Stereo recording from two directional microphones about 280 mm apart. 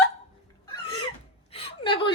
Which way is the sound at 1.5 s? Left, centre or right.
Centre.